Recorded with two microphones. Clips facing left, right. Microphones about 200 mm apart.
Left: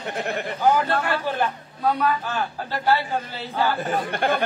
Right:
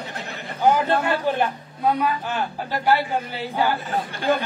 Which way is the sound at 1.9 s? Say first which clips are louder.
Even; 10° right (ahead or behind).